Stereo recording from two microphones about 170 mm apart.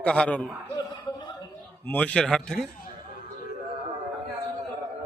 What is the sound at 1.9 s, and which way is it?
Speech, 10° left (ahead or behind).